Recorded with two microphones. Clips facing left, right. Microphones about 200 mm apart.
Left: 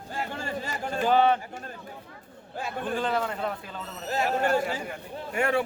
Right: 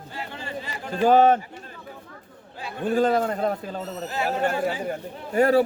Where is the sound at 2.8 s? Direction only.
40° right (ahead or behind).